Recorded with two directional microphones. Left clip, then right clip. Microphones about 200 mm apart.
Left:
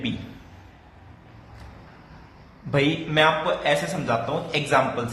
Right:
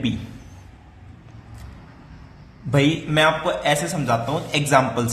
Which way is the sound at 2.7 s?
25° right (ahead or behind).